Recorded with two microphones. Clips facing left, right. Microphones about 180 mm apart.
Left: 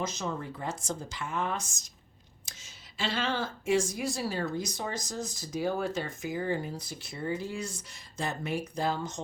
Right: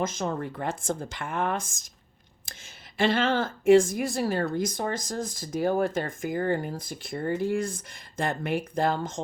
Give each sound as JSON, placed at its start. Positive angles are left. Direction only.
{"t": 0.0, "sound": "a woman's voice", "side_deg": -50}
{"t": 3.0, "sound": "a woman's voice", "side_deg": -50}